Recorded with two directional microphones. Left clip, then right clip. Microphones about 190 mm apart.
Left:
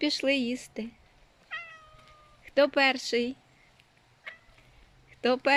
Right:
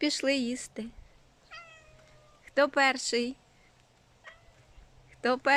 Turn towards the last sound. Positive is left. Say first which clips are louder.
# left 2 dB
turn(degrees=0)  # may be behind; listen again after turning